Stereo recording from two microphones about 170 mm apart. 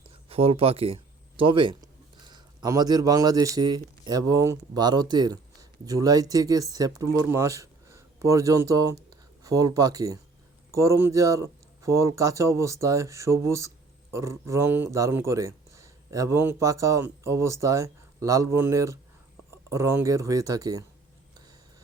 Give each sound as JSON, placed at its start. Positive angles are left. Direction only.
{"t": 0.3, "sound": "speech", "side_deg": -35}